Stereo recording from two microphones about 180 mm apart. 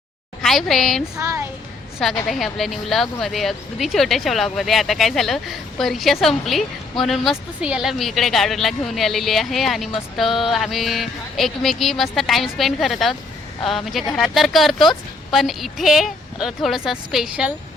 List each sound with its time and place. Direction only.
0.4 s speech: centre (ahead or behind)
1.1 s speech: 15° right (ahead or behind)
2.2 s speech: centre (ahead or behind)